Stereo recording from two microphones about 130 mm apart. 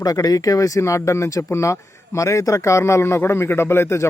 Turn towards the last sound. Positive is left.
turn(degrees=20)  # may be behind; listen again after turning